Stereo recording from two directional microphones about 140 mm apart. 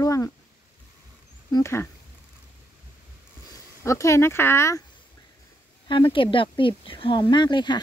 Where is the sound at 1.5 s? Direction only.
20° left (ahead or behind).